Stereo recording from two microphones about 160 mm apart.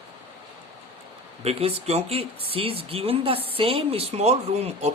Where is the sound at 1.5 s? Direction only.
40° right (ahead or behind).